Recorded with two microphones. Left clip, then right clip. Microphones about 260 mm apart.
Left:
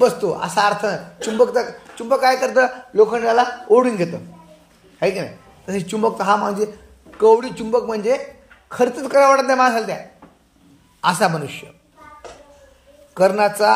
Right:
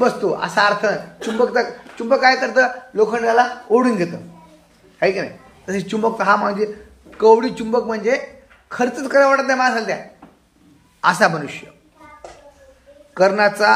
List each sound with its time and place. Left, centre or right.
0.0 s a man's voice: left
11.0 s speech: left
13.1 s speech: left